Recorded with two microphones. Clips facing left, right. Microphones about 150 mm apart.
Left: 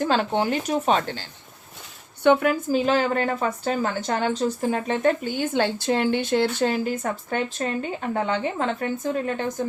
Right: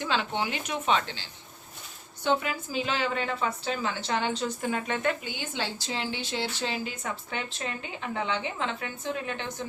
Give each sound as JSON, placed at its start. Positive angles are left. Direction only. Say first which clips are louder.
{"t": 0.0, "sound": "a woman's voice", "louder": "left 7 dB", "side_deg": 45}
{"t": 2.2, "sound": "a woman's voice", "louder": "left 9 dB", "side_deg": 55}